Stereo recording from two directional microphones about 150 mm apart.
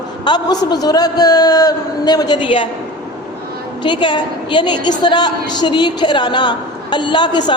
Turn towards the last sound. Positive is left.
turn(degrees=30)  # may be behind; listen again after turning